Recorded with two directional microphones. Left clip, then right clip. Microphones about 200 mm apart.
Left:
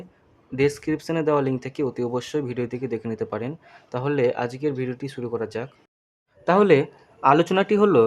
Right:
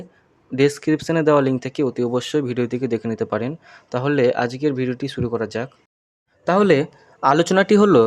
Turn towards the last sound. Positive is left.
turn(degrees=-20)  # may be behind; listen again after turning